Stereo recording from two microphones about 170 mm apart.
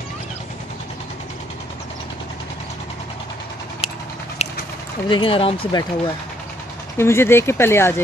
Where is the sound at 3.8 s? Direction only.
35° left (ahead or behind).